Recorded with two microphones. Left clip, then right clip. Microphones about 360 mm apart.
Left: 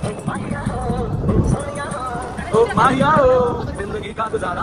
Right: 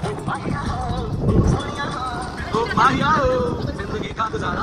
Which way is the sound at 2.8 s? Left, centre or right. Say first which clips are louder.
Even; centre.